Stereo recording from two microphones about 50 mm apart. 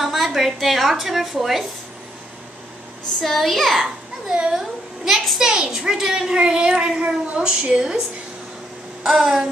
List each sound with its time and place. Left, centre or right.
0.0 s a woman's voice: centre
3.2 s a child's voice: centre
3.8 s a woman's voice: centre
9.0 s a child's voice: centre